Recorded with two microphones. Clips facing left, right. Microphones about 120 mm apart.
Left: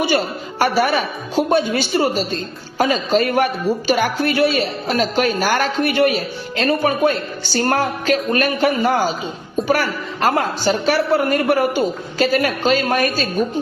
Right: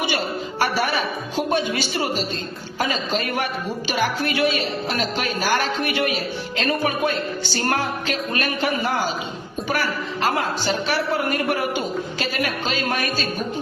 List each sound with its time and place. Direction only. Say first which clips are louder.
0.6 s a man's voice: left 6 dB; 45° left (ahead or behind)